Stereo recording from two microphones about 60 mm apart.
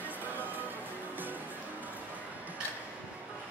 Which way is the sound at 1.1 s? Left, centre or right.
Right.